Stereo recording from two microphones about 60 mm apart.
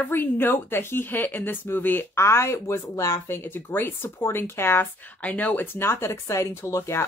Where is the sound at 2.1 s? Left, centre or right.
Left.